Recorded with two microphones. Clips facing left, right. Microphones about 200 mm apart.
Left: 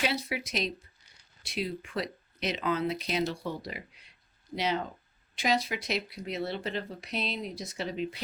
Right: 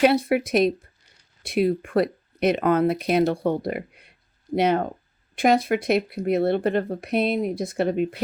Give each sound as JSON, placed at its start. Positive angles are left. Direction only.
{"t": 0.0, "sound": "speech", "side_deg": -55}